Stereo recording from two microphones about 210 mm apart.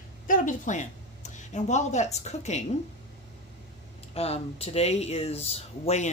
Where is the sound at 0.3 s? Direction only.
35° left (ahead or behind).